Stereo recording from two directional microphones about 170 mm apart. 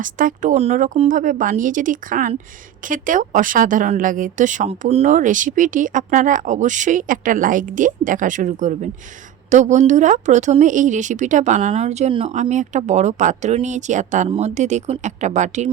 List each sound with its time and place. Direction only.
0.0 s a woman's voice: 50° right (ahead or behind)